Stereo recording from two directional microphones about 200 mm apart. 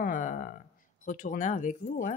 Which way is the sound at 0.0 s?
40° left (ahead or behind).